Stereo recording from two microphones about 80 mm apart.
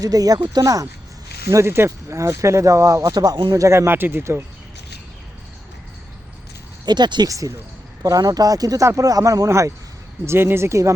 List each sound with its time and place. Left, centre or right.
0.0 s speech: right
3.5 s speech: right
6.8 s speech: right
7.3 s speech: right